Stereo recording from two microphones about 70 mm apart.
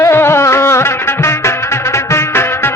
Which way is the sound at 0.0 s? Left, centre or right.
Left.